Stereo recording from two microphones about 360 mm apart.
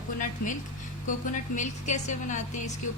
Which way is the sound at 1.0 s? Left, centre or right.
Left.